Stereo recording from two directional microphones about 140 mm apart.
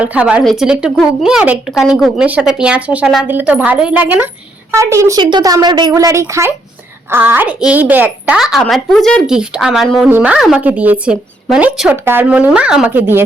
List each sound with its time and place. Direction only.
0.0 s a woman's voice: 10° right (ahead or behind)